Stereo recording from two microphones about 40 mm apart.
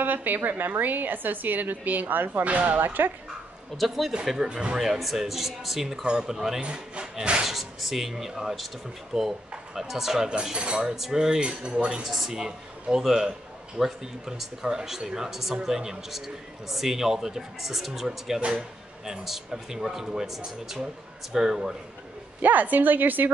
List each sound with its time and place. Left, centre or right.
0.0 s a woman's voice: right
2.4 s speech: right
2.8 s speech: right
3.7 s speech: centre
4.5 s cutlery: right
4.7 s a man's voice: centre
6.0 s a man's voice: centre
6.6 s cutlery: right
7.4 s a man's voice: centre
10.2 s cutlery: centre
11.0 s a man's voice: centre
12.0 s a man's voice: centre
22.4 s a woman's voice: right